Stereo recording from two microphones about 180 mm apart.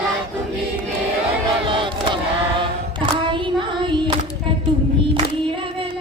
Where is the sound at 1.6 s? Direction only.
25° right (ahead or behind).